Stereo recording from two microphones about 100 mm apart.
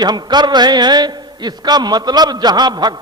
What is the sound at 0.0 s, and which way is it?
A man's voice, 45° right (ahead or behind).